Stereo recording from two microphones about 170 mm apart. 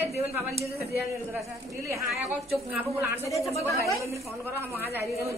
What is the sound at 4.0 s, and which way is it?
Speech, 15° right (ahead or behind).